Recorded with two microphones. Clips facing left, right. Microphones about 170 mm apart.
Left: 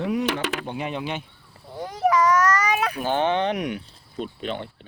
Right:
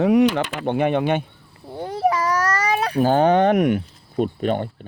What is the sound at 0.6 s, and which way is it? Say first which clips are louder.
Speech: right 10 dB; 60° right (ahead or behind).